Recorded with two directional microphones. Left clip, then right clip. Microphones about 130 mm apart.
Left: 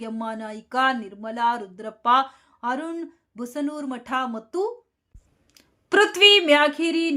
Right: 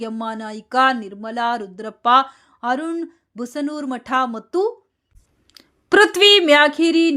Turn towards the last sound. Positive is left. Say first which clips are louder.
# right 6 dB
turn(degrees=-40)  # may be behind; listen again after turning